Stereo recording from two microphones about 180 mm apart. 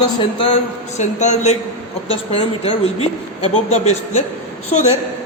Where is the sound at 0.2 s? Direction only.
30° left (ahead or behind).